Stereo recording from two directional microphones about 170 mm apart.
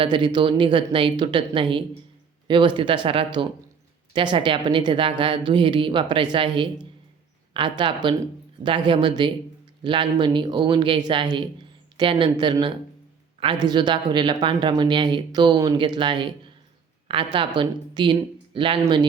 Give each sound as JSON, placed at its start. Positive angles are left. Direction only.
{"t": 0.0, "sound": "a woman's voice", "side_deg": -30}
{"t": 17.3, "sound": "a woman's voice", "side_deg": -30}